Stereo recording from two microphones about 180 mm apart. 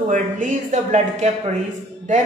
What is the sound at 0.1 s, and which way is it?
A man's voice, 45° right (ahead or behind).